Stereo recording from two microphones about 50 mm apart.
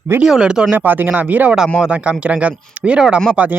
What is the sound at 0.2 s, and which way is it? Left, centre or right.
Speech, centre.